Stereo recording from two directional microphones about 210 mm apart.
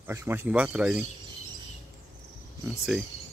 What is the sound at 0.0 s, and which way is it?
Speech, 10° right (ahead or behind).